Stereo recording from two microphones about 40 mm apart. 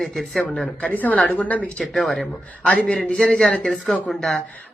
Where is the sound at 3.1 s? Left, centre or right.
Left.